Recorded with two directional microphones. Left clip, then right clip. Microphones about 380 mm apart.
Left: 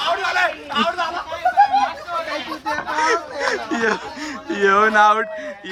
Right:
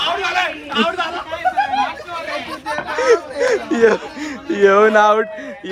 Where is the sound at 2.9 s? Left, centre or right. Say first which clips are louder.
Right 5 dB; centre.